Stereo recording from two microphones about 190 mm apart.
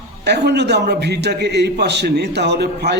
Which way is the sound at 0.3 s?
60° right (ahead or behind).